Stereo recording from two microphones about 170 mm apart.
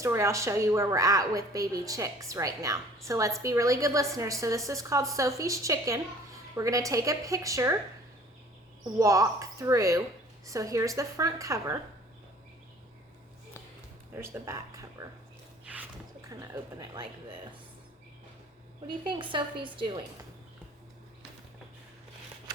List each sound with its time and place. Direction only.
0.0 s a woman's voice: 15° right (ahead or behind)
8.8 s a woman's voice: 20° right (ahead or behind)
14.2 s speech: 20° right (ahead or behind)
15.6 s a sound: 10° right (ahead or behind)
16.3 s a woman's voice: 20° right (ahead or behind)
19.0 s a woman's voice: 30° right (ahead or behind)